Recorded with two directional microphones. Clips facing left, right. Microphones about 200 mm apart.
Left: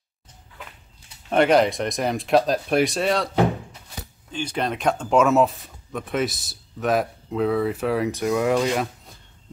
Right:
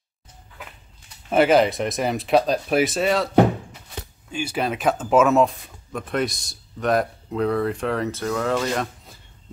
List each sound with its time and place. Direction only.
1.3 s speech: 5° right (ahead or behind)
4.3 s speech: 10° right (ahead or behind); by 8.8 s 10° left (ahead or behind)